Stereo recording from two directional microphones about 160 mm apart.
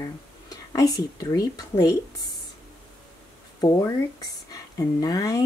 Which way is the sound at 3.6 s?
20° left (ahead or behind).